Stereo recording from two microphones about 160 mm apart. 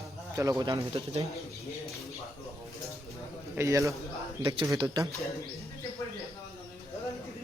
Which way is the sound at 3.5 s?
20° right (ahead or behind).